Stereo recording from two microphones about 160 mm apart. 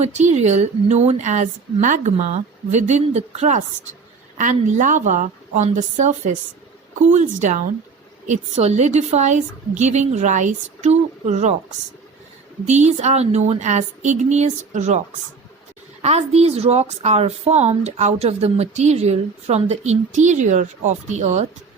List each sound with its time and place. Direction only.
0.0 s a woman's voice: 45° right (ahead or behind)
12.6 s a woman's voice: 45° right (ahead or behind)